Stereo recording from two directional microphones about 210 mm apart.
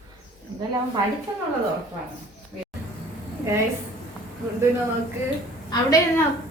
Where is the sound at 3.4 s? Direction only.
15° right (ahead or behind).